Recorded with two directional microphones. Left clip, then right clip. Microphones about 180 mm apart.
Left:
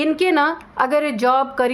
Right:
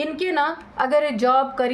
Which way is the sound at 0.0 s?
35° left (ahead or behind).